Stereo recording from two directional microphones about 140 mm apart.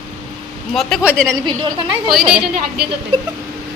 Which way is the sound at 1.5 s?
35° right (ahead or behind).